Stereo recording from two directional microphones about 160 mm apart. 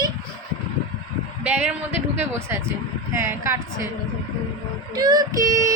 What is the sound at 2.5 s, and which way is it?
A woman's voice, 10° right (ahead or behind).